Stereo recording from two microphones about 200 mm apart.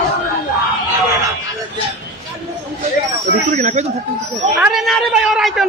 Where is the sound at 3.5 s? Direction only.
40° right (ahead or behind).